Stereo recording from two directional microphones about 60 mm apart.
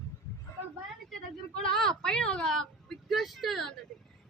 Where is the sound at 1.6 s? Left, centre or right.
Centre.